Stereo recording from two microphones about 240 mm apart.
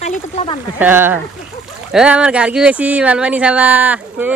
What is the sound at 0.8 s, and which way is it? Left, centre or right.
Speech, centre.